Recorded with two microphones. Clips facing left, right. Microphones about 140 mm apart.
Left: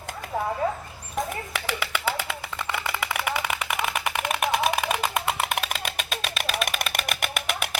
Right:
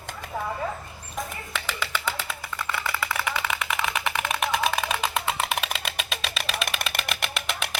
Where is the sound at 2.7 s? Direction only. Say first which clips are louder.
Even; 20° left (ahead or behind).